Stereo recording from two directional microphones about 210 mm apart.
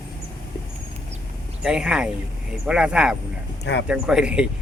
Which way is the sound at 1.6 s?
5° right (ahead or behind).